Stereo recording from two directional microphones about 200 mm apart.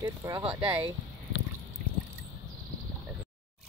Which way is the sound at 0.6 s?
10° right (ahead or behind).